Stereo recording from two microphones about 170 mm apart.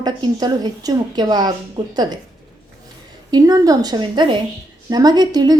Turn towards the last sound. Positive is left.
turn(degrees=-25)  # may be behind; listen again after turning